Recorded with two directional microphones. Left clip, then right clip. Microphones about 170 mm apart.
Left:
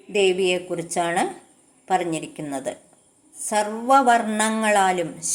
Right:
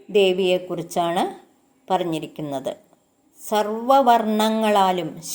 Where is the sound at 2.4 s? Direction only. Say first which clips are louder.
Right 2 dB; 40° right (ahead or behind).